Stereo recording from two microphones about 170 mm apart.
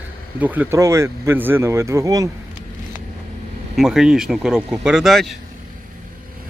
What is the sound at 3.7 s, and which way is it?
Speech, centre (ahead or behind).